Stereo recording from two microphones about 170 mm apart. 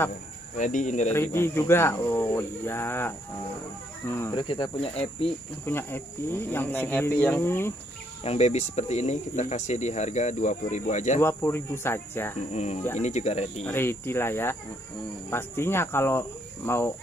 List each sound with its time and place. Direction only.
0.6 s speech: 50° left (ahead or behind)
1.1 s speech: 15° left (ahead or behind)
4.4 s speech: 30° left (ahead or behind)
5.7 s speech: 15° left (ahead or behind)
8.2 s speech: 40° left (ahead or behind)
11.1 s speech: 15° left (ahead or behind)
12.5 s speech: 45° left (ahead or behind)
13.7 s speech: 15° left (ahead or behind)